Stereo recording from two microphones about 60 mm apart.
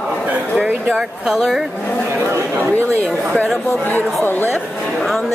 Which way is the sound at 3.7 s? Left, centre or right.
Left.